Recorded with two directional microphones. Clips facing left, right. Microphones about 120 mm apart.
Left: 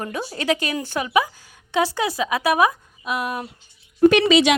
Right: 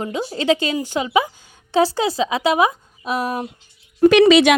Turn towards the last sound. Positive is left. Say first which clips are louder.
# right 4 dB
turn(degrees=-90)